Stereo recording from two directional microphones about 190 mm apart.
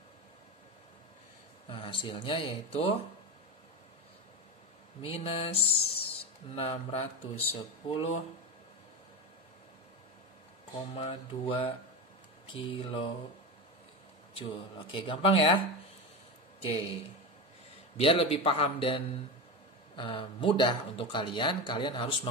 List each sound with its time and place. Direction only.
1.7 s speech: 30° left (ahead or behind)
5.0 s mantra: 30° left (ahead or behind)
11.0 s speech: 30° left (ahead or behind)
14.9 s speech: 25° left (ahead or behind)
16.6 s mantra: 30° left (ahead or behind)
17.9 s speech: 30° left (ahead or behind)